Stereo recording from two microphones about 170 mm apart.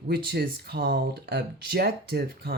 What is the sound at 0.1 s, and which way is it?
Speech, 70° right (ahead or behind).